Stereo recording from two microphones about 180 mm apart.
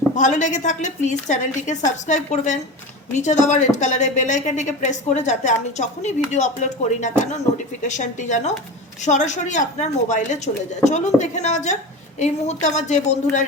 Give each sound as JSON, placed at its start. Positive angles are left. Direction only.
{"t": 0.2, "sound": "a woman's voice", "side_deg": 45}